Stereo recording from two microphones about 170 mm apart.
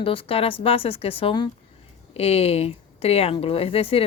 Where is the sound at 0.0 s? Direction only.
30° left (ahead or behind).